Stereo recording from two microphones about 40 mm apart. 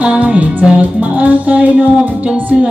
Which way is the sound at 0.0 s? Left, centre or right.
Right.